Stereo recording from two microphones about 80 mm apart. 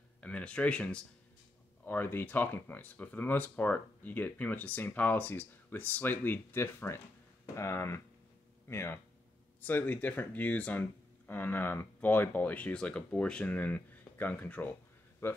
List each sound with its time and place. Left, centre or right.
0.2 s speech: centre
1.9 s speech: left